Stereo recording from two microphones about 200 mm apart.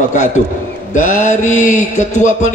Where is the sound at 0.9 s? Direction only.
40° left (ahead or behind).